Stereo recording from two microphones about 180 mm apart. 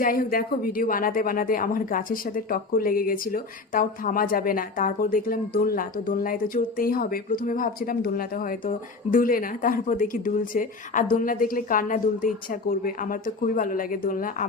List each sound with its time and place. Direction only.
0.0 s speech: 50° left (ahead or behind)